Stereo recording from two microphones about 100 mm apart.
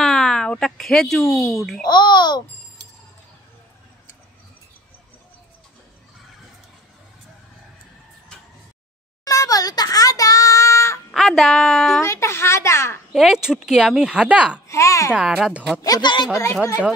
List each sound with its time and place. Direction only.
0.0 s speech: 5° left (ahead or behind)
1.9 s a child's voice: 45° left (ahead or behind)
9.2 s a sound: 35° left (ahead or behind)
11.1 s a woman's voice: 5° left (ahead or behind)
12.0 s a child's voice: 30° left (ahead or behind)
13.1 s speech: 5° right (ahead or behind)
14.7 s speech: 30° left (ahead or behind)
15.1 s speech: 5° right (ahead or behind)
15.8 s speech: 45° left (ahead or behind)